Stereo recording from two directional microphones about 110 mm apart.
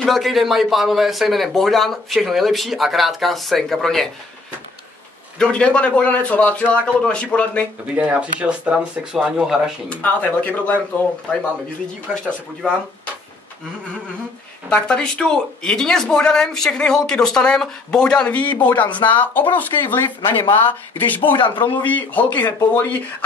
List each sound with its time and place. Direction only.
0.0 s speech: centre (ahead or behind)
5.4 s speech: 10° left (ahead or behind)
7.9 s speech: 15° right (ahead or behind)
9.8 s speech: 10° left (ahead or behind)
14.7 s speech: 10° left (ahead or behind)
20.2 s speech: 40° left (ahead or behind)
20.6 s speech: 15° left (ahead or behind)
21.3 s a man's voice: 45° left (ahead or behind)
21.8 s speech: 15° left (ahead or behind)